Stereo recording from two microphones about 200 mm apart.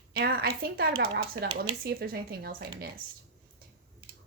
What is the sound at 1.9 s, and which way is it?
Speech, 50° right (ahead or behind).